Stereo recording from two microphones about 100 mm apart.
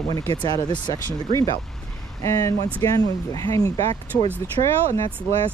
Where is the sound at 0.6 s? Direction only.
50° left (ahead or behind).